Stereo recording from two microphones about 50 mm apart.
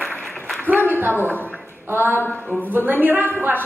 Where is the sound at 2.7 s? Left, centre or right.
Right.